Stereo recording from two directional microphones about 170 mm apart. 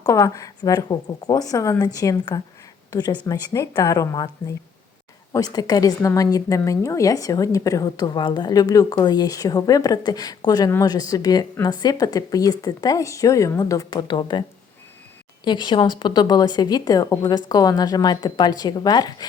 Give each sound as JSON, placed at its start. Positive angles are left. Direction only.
{"t": 0.0, "sound": "a woman's voice", "side_deg": 20}
{"t": 5.3, "sound": "a woman's voice", "side_deg": 20}
{"t": 15.4, "sound": "a woman's voice", "side_deg": 25}